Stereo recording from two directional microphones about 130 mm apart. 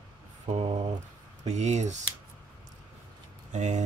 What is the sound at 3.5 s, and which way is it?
Speech, 65° right (ahead or behind).